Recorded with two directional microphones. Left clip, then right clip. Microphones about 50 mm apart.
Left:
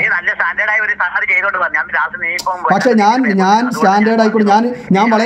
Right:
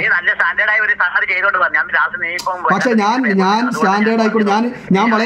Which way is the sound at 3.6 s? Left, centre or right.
Left.